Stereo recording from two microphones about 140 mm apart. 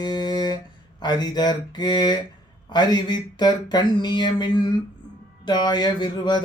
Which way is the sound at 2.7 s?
30° left (ahead or behind).